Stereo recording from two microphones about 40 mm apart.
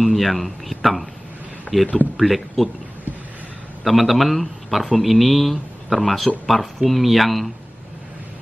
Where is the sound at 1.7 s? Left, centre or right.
Left.